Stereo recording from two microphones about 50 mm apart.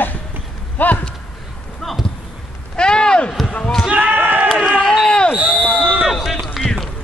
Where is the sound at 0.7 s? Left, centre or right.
Left.